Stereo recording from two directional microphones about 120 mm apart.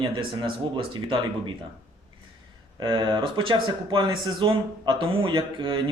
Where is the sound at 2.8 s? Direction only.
40° right (ahead or behind).